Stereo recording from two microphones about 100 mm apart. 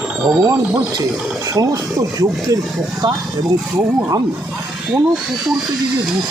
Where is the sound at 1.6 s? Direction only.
35° right (ahead or behind).